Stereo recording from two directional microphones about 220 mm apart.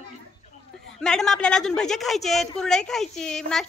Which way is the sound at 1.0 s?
Centre (ahead or behind).